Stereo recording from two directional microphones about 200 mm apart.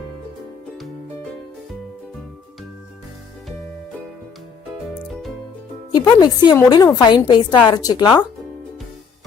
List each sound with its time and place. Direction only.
5.9 s a woman's voice: 20° left (ahead or behind)